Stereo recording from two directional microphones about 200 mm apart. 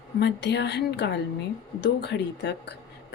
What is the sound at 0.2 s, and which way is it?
Speech, 60° left (ahead or behind).